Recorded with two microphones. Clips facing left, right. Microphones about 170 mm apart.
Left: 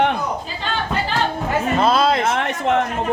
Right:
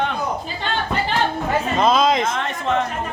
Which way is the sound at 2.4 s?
70° left (ahead or behind).